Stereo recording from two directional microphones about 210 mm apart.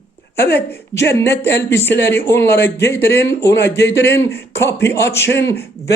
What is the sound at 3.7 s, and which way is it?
Speech, 50° left (ahead or behind).